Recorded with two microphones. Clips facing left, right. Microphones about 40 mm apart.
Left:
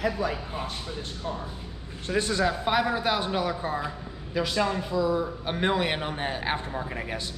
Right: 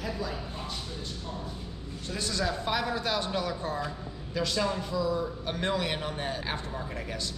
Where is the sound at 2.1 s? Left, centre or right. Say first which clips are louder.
Left 6 dB; left.